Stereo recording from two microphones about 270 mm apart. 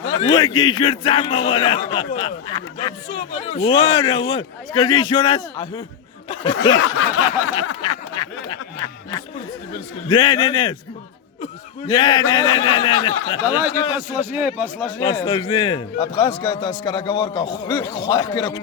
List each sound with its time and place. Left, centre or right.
0.2 s a man's voice: centre
3.8 s a man's voice: centre
6.8 s snicker: left
8.1 s a man's voice: centre
10.1 s a man's voice: centre
11.9 s a man's voice: centre
13.9 s a man's voice: centre
15.2 s a man's voice: centre